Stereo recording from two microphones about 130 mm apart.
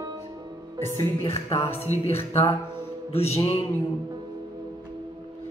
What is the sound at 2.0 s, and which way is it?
A woman's voice, 50° left (ahead or behind).